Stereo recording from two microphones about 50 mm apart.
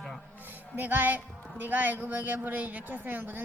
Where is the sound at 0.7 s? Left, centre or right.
Right.